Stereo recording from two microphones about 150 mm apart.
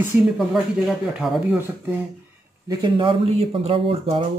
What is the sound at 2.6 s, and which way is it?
Speech, 30° right (ahead or behind).